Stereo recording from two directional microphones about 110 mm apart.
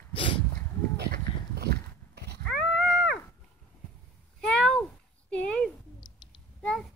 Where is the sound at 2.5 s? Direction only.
Centre (ahead or behind).